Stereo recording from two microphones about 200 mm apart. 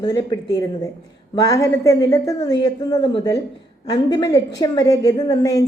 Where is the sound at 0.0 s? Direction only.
20° left (ahead or behind).